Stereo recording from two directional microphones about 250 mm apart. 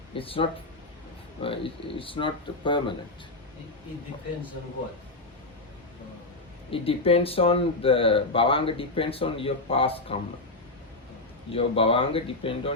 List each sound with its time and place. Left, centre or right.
0.1 s speech: left
6.7 s speech: left
11.5 s speech: left